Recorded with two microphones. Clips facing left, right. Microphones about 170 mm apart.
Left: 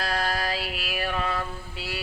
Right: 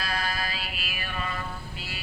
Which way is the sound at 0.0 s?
65° left (ahead or behind).